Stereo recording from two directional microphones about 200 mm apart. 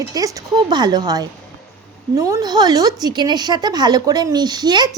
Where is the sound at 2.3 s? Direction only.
20° right (ahead or behind).